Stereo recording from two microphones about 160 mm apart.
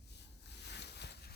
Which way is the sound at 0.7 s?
90° left.